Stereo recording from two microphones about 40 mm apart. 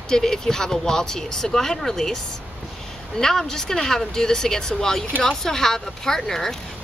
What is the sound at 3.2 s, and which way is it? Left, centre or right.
Speech, centre.